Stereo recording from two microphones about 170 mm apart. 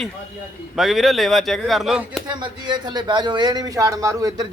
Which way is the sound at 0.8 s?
Centre (ahead or behind).